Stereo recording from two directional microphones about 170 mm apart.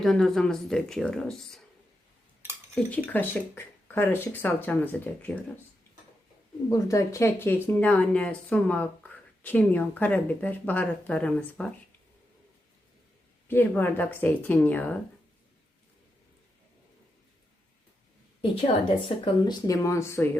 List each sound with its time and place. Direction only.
0.0 s speech: centre (ahead or behind)
2.9 s speech: 10° left (ahead or behind)
6.7 s speech: 20° left (ahead or behind)
13.5 s speech: 10° left (ahead or behind)
18.5 s a woman's voice: 30° left (ahead or behind); by 20.3 s 15° left (ahead or behind)